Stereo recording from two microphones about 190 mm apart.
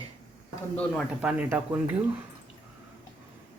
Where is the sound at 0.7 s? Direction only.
5° left (ahead or behind).